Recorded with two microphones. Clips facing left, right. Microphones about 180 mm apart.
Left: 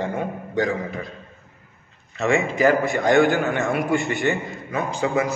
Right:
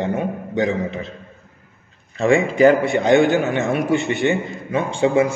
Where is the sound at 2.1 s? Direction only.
30° right (ahead or behind).